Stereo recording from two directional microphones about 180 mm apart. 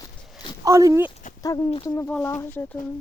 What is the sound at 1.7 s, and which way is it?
Speech, 30° left (ahead or behind).